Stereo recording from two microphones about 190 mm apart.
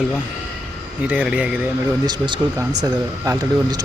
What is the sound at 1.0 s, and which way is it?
Speech, 5° right (ahead or behind).